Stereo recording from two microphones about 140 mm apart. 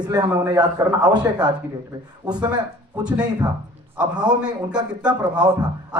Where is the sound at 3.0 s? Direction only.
30° right (ahead or behind).